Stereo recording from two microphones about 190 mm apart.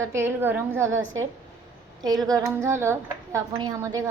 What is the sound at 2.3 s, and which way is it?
A woman's voice, 15° right (ahead or behind).